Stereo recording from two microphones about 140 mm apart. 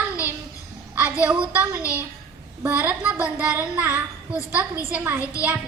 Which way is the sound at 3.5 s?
15° right (ahead or behind).